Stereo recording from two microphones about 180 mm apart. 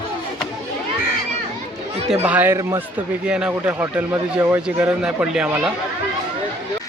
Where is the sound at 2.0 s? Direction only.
35° right (ahead or behind).